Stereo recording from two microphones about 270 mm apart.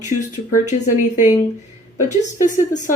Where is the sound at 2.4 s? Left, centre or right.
Left.